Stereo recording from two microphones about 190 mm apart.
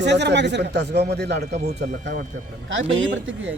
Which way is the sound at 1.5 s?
35° right (ahead or behind).